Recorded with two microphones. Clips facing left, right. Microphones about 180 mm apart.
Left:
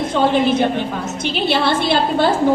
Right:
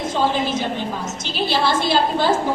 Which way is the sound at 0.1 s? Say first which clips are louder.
Left 6 dB; 60° left (ahead or behind).